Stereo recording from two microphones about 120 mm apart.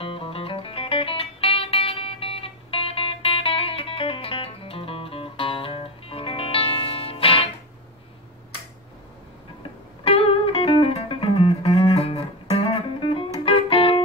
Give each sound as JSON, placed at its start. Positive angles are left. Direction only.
{"t": 0.0, "sound": "music", "side_deg": 50}
{"t": 10.0, "sound": "music", "side_deg": 50}